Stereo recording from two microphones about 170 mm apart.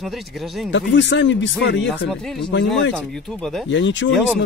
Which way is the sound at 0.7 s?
90° left.